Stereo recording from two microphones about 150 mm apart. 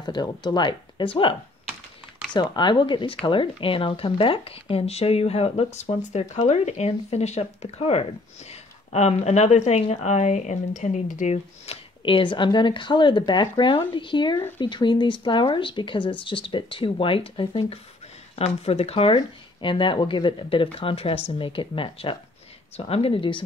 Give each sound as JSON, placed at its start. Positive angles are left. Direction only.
{"t": 0.0, "sound": "speech", "side_deg": 30}
{"t": 2.3, "sound": "speech", "side_deg": 30}